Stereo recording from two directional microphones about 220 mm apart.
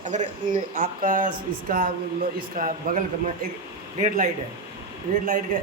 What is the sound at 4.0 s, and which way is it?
Speech, 35° right (ahead or behind).